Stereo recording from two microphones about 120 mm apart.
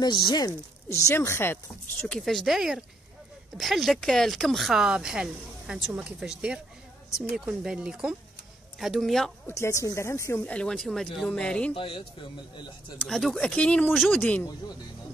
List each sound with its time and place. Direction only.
0.3 s speech: 35° left (ahead or behind)
0.9 s speech: 25° left (ahead or behind)
2.0 s speech: 5° left (ahead or behind)
9.5 s speech: 25° left (ahead or behind); by 11.7 s 10° left (ahead or behind)
11.7 s speech: 50° left (ahead or behind)
13.1 s speech: 5° left (ahead or behind)